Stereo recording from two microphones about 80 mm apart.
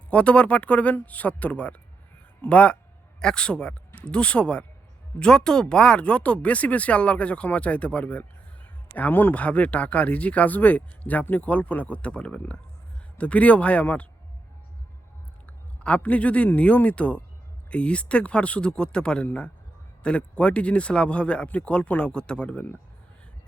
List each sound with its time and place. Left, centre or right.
0.1 s speech: centre
15.4 s a man's voice: centre